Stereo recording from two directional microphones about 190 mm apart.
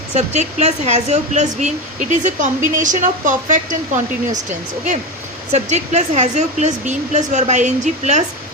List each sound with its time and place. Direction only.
0.1 s speech: 35° right (ahead or behind)
5.5 s speech: 35° right (ahead or behind)